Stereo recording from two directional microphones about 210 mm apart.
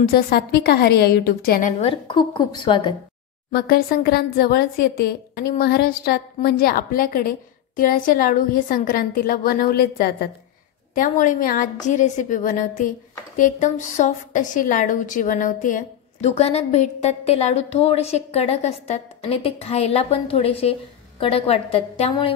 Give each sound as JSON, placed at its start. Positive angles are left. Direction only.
{"t": 0.0, "sound": "a woman's voice", "side_deg": 45}
{"t": 3.5, "sound": "a woman's voice", "side_deg": 45}